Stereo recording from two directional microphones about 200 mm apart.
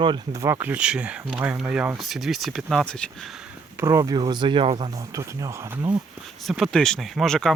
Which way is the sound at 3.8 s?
15° right (ahead or behind).